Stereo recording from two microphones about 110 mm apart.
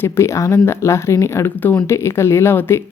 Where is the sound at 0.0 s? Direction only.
25° left (ahead or behind).